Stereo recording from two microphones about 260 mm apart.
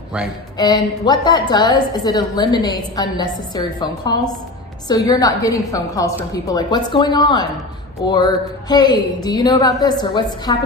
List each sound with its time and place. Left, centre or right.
0.5 s a woman's voice: centre